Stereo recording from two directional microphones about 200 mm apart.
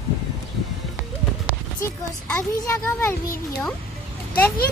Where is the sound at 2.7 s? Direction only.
10° left (ahead or behind).